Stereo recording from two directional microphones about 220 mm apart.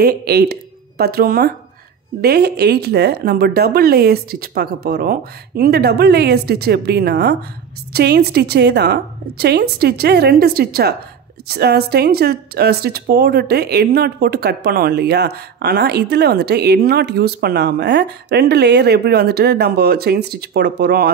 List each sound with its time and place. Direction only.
0.0 s speech: 45° right (ahead or behind)